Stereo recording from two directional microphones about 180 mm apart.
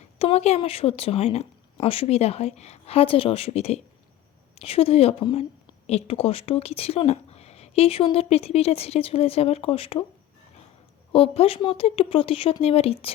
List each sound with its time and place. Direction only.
0.2 s speech: 35° left (ahead or behind)
11.1 s speech: 30° left (ahead or behind)